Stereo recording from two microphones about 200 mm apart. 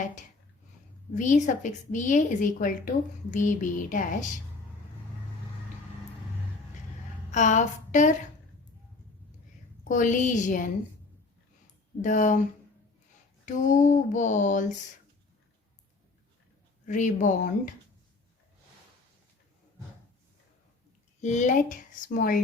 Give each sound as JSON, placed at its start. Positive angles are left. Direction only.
{"t": 1.1, "sound": "a woman's voice", "side_deg": 40}
{"t": 7.3, "sound": "a sound", "side_deg": 35}
{"t": 9.9, "sound": "a woman's voice", "side_deg": 40}
{"t": 12.0, "sound": "a woman's voice", "side_deg": 40}
{"t": 13.4, "sound": "a woman's voice", "side_deg": 40}
{"t": 16.8, "sound": "a woman's voice", "side_deg": 40}
{"t": 21.2, "sound": "a woman's voice", "side_deg": 35}